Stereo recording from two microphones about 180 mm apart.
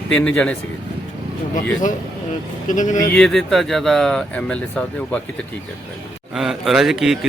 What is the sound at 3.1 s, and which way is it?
Speech, 5° left (ahead or behind).